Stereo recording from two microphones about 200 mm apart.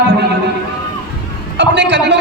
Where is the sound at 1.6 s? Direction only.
60° right (ahead or behind).